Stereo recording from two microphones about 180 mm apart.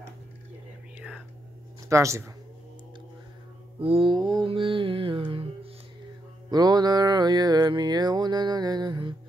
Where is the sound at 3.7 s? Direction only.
30° right (ahead or behind).